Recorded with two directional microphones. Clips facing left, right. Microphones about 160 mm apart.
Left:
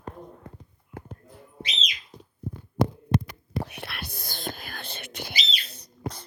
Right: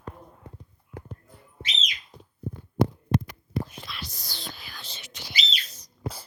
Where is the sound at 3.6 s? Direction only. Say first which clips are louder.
Left 3 dB; 65° left (ahead or behind).